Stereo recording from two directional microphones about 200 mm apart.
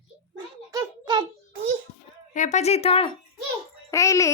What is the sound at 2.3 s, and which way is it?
Speech, 40° left (ahead or behind).